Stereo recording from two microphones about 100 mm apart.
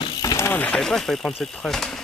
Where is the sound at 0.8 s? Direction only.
5° left (ahead or behind).